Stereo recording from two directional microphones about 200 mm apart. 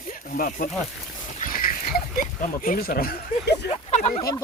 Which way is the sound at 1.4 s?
45° left (ahead or behind).